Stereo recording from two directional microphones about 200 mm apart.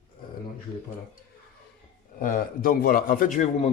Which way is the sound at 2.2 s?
45° left (ahead or behind).